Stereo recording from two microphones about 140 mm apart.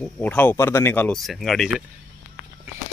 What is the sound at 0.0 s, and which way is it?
Speech, 10° left (ahead or behind).